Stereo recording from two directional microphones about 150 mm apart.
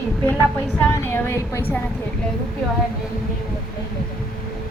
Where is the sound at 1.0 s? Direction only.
15° left (ahead or behind).